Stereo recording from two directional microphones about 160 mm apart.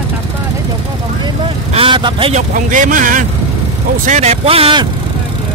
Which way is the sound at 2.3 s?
55° right (ahead or behind).